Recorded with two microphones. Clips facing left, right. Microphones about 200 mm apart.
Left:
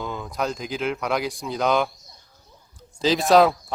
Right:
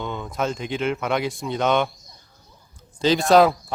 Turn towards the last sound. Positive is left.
turn(degrees=0)  # may be behind; listen again after turning